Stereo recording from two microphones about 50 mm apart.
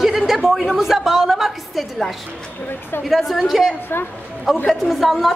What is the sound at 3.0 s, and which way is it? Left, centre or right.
A woman's voice, centre.